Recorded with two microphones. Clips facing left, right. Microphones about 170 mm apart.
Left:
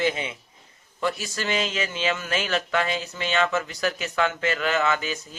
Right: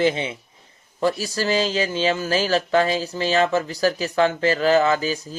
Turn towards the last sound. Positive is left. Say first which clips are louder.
# right 5 dB
turn(degrees=-35)  # may be behind; listen again after turning